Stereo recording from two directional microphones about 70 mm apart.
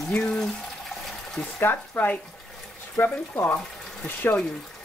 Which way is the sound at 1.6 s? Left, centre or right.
Left.